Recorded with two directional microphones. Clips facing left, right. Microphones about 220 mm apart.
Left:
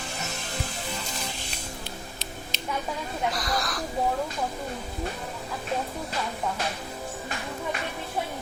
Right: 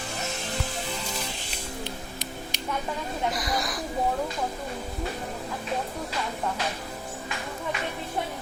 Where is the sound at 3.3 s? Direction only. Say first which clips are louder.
Even; 15° right (ahead or behind).